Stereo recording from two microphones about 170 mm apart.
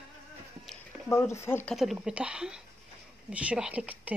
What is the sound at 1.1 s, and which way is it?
Speech, 15° left (ahead or behind).